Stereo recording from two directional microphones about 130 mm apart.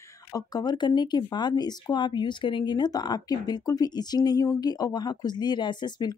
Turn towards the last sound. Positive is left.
turn(degrees=35)  # may be behind; listen again after turning